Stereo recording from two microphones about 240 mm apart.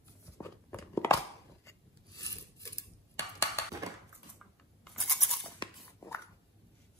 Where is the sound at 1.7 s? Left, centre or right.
Centre.